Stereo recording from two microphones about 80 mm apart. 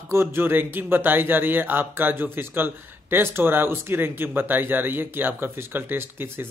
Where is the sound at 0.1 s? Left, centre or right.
Right.